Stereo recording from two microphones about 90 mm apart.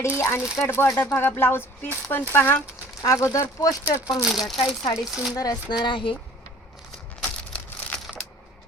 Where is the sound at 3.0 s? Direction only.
35° left (ahead or behind).